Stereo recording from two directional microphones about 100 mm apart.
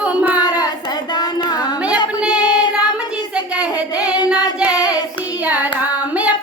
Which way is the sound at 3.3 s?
10° right (ahead or behind).